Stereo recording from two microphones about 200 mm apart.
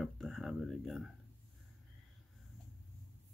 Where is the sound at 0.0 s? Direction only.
Centre (ahead or behind).